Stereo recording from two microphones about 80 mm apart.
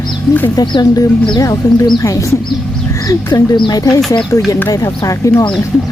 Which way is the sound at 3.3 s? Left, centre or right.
Left.